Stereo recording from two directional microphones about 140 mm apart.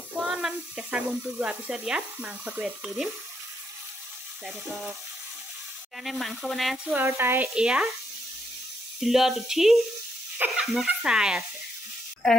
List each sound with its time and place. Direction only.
0.2 s speech: 5° right (ahead or behind)
4.5 s speech: centre (ahead or behind)
6.0 s speech: centre (ahead or behind)
7.0 s speech: 15° right (ahead or behind)
9.0 s speech: centre (ahead or behind)